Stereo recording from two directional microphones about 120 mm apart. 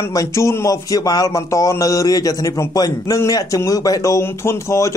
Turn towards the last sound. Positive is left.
turn(degrees=25)  # may be behind; listen again after turning